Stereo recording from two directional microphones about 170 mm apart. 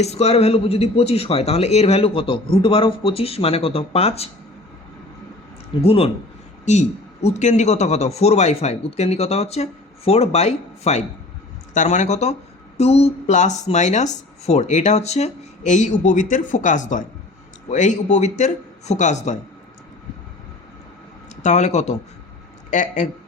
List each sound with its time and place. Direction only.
0.0 s a man's voice: 40° left (ahead or behind)
5.8 s a man's voice: 35° left (ahead or behind)
21.4 s speech: 45° left (ahead or behind)